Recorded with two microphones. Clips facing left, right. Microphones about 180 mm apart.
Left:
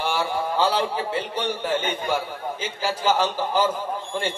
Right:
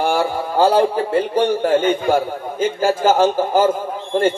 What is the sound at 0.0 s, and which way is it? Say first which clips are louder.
A man's voice: right 6 dB; 50° right (ahead or behind).